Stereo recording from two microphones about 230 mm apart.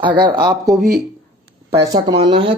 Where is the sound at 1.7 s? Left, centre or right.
Centre.